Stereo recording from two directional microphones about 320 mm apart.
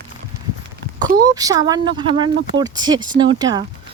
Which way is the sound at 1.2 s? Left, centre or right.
Centre.